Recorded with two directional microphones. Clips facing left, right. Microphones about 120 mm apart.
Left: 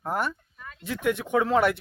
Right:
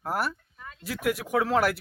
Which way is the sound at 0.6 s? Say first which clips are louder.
Left 1 dB; 30° right (ahead or behind).